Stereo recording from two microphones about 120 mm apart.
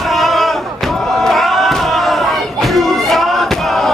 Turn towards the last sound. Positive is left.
turn(degrees=0)  # may be behind; listen again after turning